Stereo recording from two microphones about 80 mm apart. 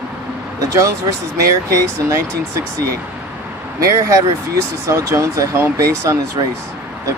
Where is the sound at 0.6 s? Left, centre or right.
Right.